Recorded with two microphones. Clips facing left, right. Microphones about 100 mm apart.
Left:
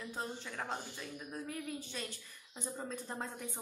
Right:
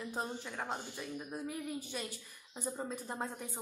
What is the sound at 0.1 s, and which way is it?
Speech, 10° right (ahead or behind).